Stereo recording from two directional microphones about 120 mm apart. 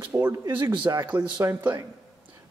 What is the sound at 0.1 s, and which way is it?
Speech, 25° right (ahead or behind).